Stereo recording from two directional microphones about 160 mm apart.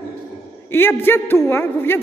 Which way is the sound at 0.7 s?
15° left (ahead or behind).